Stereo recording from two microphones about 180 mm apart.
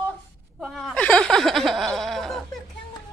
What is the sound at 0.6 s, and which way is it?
Speech, centre (ahead or behind).